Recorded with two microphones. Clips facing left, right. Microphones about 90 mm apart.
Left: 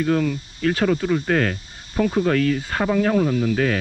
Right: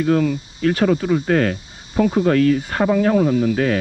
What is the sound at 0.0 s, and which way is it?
Speech, 30° right (ahead or behind).